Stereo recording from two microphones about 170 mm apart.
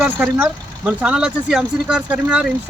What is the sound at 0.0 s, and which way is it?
Speech, 5° right (ahead or behind).